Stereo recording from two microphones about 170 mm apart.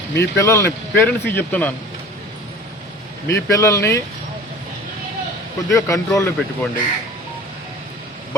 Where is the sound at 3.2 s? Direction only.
20° left (ahead or behind).